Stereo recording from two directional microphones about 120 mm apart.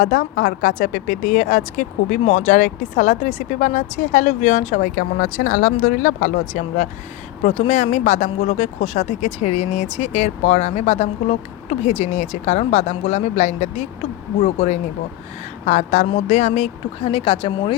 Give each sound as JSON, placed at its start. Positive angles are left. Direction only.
{"t": 0.6, "sound": "speech", "side_deg": 90}
{"t": 7.4, "sound": "speech", "side_deg": 60}
{"t": 14.4, "sound": "speech", "side_deg": 55}
{"t": 15.6, "sound": "speech", "side_deg": 75}